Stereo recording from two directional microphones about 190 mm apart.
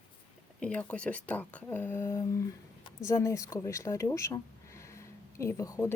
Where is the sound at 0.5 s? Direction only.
5° left (ahead or behind).